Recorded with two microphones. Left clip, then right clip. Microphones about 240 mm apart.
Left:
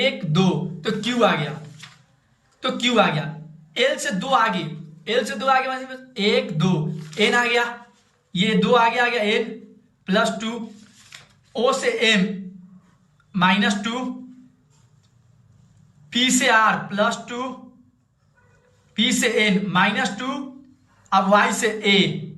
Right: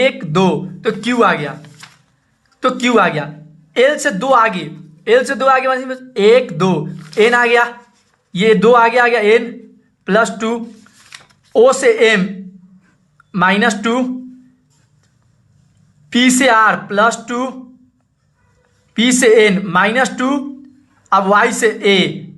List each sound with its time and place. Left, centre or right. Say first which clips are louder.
0.0 s speech: right 8 dB; centre
2.6 s a man's voice: right 7 dB; centre
11.1 s a sound: right 15 dB; centre
13.3 s speech: right 6 dB; centre
16.1 s speech: right 6 dB; centre
18.9 s speech: right 10 dB; centre